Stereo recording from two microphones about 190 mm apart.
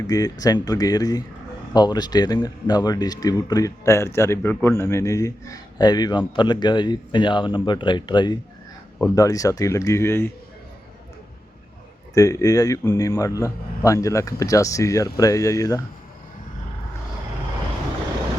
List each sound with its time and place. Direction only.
0.1 s a man's voice: 20° left (ahead or behind)
12.1 s a man's voice: 15° left (ahead or behind)